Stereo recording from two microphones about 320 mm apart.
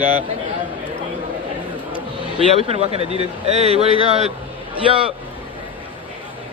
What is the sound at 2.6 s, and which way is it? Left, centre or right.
Speech, centre.